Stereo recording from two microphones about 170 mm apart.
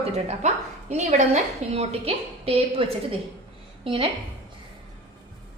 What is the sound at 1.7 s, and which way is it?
A woman's voice, 35° right (ahead or behind).